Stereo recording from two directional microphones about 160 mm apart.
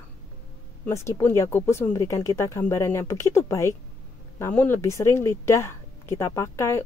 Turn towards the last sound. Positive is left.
turn(degrees=15)  # may be behind; listen again after turning